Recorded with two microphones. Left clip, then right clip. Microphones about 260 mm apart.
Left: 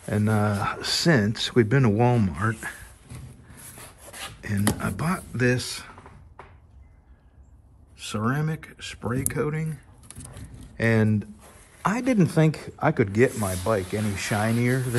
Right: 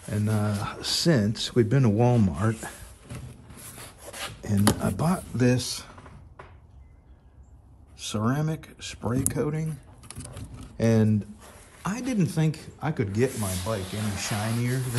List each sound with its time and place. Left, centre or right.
0.0 s speech: centre
2.3 s speech: centre
2.7 s a sound: centre
4.9 s speech: centre
8.2 s speech: centre
10.8 s speech: centre